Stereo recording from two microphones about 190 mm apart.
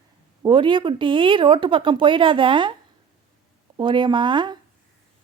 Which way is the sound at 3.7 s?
25° right (ahead or behind).